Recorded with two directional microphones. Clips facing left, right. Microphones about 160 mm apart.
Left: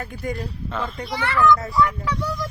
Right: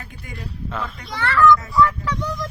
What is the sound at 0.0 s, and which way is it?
Speech, 45° left (ahead or behind).